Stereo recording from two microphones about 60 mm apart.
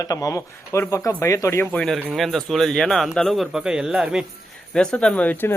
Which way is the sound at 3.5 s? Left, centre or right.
Centre.